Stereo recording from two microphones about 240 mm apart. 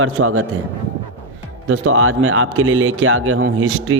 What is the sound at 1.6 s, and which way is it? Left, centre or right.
Speech, right.